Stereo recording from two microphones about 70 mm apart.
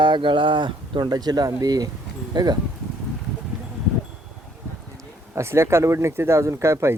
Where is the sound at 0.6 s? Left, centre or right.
Right.